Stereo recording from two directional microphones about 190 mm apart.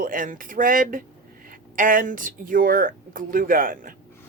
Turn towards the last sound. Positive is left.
turn(degrees=-45)  # may be behind; listen again after turning